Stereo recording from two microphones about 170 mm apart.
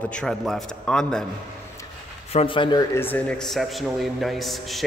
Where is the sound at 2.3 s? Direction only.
30° left (ahead or behind).